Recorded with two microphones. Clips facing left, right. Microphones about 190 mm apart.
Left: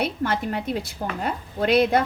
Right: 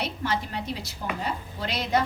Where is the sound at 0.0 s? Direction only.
55° left (ahead or behind).